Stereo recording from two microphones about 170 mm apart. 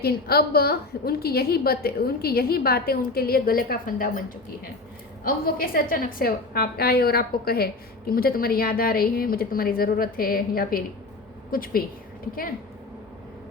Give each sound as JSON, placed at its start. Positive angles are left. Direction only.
{"t": 0.0, "sound": "a woman's voice", "side_deg": 65}
{"t": 5.2, "sound": "a woman's voice", "side_deg": 60}